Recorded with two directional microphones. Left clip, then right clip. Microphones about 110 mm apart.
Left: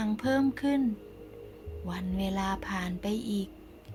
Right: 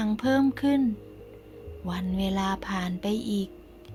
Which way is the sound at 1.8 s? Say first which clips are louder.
Right 4 dB; 45° right (ahead or behind).